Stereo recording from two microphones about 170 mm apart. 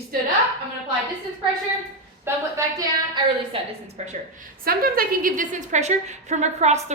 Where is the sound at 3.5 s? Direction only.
40° right (ahead or behind).